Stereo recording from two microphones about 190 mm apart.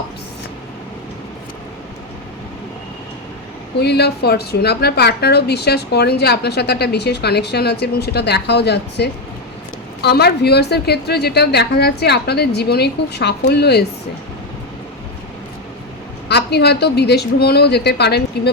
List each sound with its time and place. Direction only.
3.8 s a woman's voice: 60° left (ahead or behind)
16.3 s a woman's voice: 60° left (ahead or behind)